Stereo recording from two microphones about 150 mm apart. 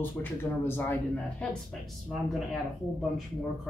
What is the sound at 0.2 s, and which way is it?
Speech, 15° left (ahead or behind).